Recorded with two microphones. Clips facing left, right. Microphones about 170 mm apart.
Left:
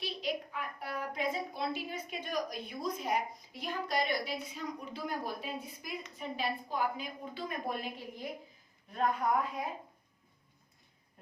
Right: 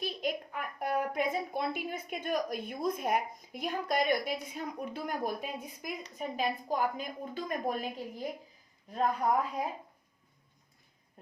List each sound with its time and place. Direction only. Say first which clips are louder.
0.0 s a woman's voice: right 2 dB; 50° right (ahead or behind)
8.9 s speech: right 2 dB; 35° right (ahead or behind)